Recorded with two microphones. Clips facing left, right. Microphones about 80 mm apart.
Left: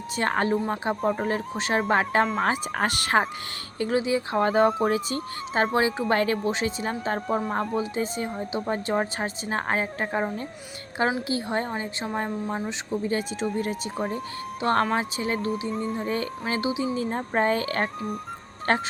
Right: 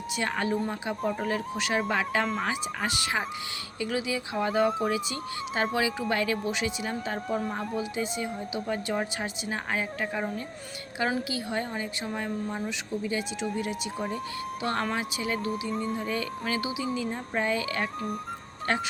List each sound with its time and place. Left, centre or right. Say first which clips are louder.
0.2 s a woman's voice: left 5 dB; left
3.8 s a woman's voice: left 6 dB; left
11.3 s a woman's voice: left 4 dB; left